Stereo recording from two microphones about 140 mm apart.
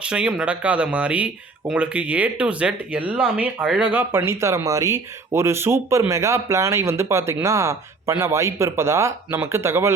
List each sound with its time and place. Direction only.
0.0 s speech: 5° right (ahead or behind)